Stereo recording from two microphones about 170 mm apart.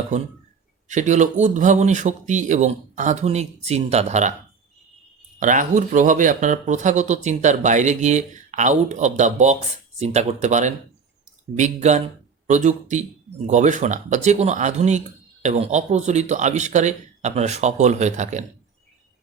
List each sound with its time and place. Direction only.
0.9 s speech: 45° right (ahead or behind)
5.4 s speech: 50° right (ahead or behind)